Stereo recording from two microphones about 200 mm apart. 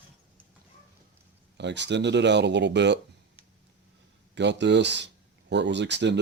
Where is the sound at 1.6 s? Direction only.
60° right (ahead or behind).